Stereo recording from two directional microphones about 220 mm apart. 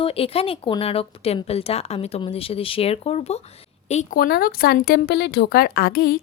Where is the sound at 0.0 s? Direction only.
25° left (ahead or behind).